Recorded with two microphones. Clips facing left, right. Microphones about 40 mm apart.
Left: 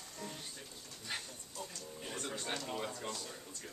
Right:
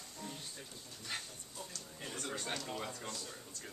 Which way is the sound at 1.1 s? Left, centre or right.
Centre.